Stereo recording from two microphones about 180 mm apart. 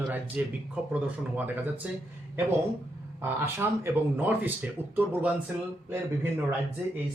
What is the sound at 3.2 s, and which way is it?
Speech, 10° right (ahead or behind).